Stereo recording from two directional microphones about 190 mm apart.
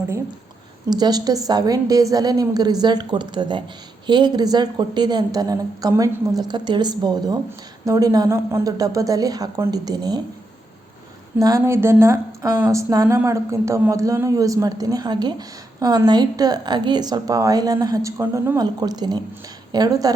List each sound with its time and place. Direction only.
0.9 s a woman's voice: 20° right (ahead or behind)
11.3 s a woman's voice: 15° right (ahead or behind)